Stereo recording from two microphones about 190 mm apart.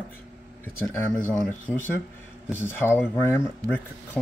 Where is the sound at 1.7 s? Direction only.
10° left (ahead or behind).